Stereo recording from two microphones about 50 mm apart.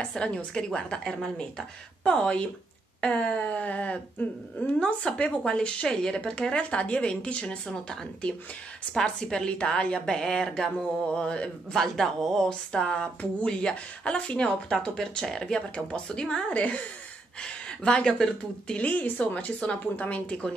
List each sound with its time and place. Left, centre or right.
0.0 s speech: centre
1.0 s speech: centre
2.0 s a woman's voice: left
11.8 s a woman's voice: centre
12.4 s a woman's voice: centre
16.5 s speech: left
18.8 s speech: left